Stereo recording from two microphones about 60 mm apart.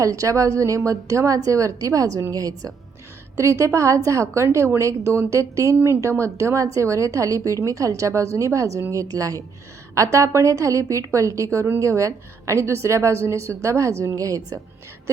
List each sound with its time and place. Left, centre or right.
0.0 s a woman's voice: right
2.3 s a woman's voice: right
3.3 s a woman's voice: right
9.9 s a woman's voice: right